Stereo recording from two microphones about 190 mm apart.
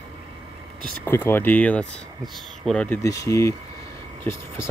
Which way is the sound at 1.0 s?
10° left (ahead or behind).